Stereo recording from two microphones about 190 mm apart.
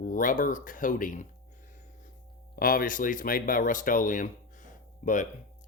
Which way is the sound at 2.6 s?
50° left (ahead or behind).